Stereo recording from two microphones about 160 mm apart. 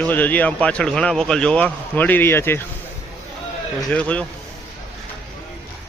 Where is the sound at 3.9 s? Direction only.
10° left (ahead or behind).